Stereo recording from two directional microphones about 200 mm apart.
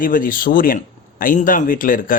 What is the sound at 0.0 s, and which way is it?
A man's voice, 45° left (ahead or behind).